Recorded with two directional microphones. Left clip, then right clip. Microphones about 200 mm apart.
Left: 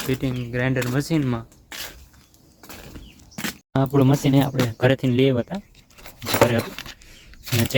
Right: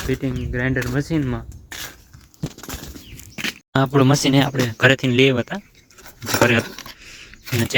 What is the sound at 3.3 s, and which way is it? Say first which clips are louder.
Speech: right 4 dB; 5° left (ahead or behind).